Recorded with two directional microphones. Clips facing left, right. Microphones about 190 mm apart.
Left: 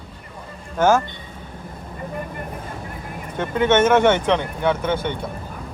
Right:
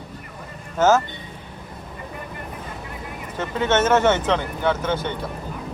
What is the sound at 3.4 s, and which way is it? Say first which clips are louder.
Speech: left 4 dB; 10° left (ahead or behind).